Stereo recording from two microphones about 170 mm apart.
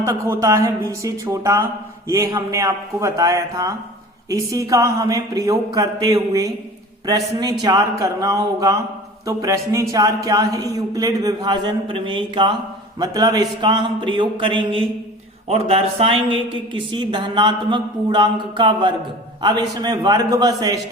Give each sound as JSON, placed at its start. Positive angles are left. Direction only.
{"t": 0.0, "sound": "a man's voice", "side_deg": -15}